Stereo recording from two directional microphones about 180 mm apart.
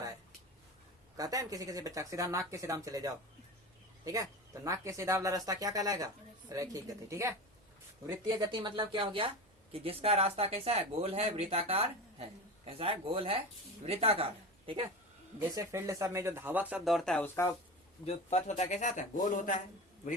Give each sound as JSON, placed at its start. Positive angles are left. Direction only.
{"t": 1.1, "sound": "speech", "side_deg": -20}
{"t": 15.4, "sound": "speech", "side_deg": -15}
{"t": 18.0, "sound": "speech", "side_deg": 35}